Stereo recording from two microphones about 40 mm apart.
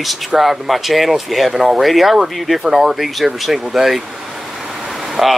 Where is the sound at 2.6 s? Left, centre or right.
Centre.